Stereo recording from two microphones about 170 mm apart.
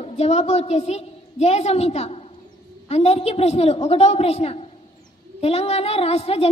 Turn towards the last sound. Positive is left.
turn(degrees=35)  # may be behind; listen again after turning